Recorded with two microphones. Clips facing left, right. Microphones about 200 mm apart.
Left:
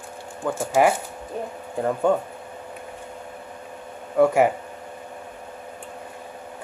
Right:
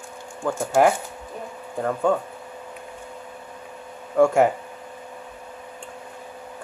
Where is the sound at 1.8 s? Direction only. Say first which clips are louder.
Left 1 dB; 15° left (ahead or behind).